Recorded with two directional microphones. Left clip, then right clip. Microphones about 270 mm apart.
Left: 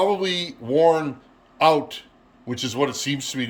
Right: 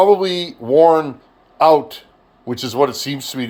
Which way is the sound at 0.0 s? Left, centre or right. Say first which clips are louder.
Right 8 dB; centre.